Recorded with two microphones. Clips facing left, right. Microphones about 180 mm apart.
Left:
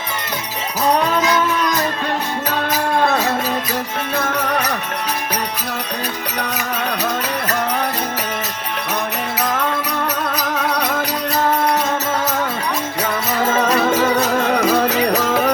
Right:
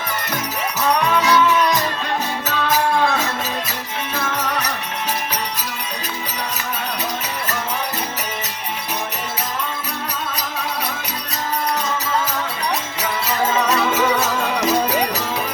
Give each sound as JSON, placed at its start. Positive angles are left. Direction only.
{"t": 2.5, "sound": "music", "side_deg": 45}
{"t": 4.1, "sound": "music", "side_deg": 60}
{"t": 10.4, "sound": "music", "side_deg": 65}
{"t": 13.0, "sound": "music", "side_deg": 55}